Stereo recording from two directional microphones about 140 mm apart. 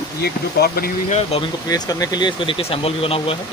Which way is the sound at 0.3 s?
90° left.